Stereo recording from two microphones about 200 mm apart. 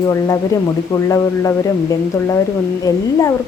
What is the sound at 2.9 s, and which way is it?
Speech, 15° left (ahead or behind).